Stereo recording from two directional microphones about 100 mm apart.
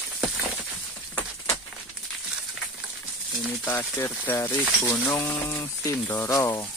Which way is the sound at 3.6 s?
20° left (ahead or behind).